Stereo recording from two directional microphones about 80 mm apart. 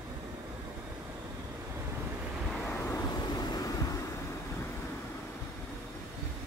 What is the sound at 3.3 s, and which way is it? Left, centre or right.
Vehicle, left.